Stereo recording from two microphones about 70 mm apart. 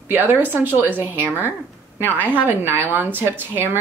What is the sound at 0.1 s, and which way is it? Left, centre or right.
A woman's voice, right.